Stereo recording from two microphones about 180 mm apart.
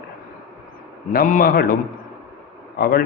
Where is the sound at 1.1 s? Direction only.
50° left (ahead or behind).